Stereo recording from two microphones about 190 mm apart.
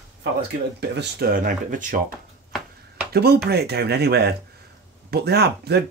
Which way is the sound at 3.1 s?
55° right (ahead or behind).